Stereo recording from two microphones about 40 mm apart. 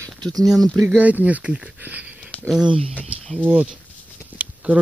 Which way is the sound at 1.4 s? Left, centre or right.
Right.